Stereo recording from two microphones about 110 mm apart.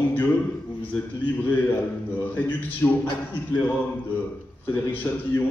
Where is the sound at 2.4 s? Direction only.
15° left (ahead or behind).